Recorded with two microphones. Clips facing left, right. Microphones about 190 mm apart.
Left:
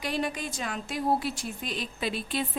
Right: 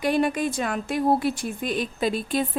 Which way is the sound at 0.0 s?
55° right (ahead or behind).